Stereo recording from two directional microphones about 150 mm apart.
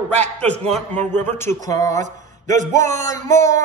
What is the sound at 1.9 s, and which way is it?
A man's voice, 55° right (ahead or behind).